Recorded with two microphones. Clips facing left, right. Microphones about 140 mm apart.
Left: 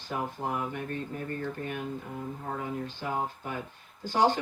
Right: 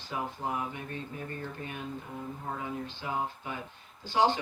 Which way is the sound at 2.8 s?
50° left (ahead or behind).